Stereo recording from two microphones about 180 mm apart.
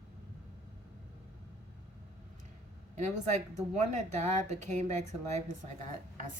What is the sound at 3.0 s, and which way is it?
A woman's voice, 40° right (ahead or behind).